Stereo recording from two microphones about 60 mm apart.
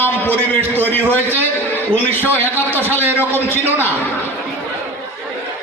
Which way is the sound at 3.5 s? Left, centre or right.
Left.